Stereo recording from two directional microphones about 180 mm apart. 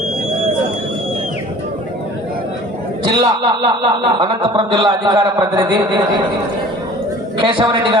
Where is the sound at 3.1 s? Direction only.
20° right (ahead or behind).